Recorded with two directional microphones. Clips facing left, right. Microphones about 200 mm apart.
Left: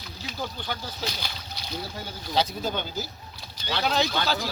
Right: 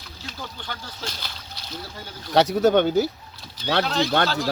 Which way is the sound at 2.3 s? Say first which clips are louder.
Right 10 dB; 75° right (ahead or behind).